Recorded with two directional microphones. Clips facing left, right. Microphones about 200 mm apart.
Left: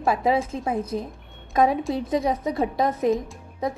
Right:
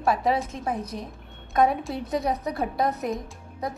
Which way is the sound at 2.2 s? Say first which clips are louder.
Left 3 dB; 25° left (ahead or behind).